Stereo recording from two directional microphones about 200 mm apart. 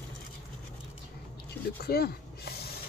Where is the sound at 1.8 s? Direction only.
50° left (ahead or behind).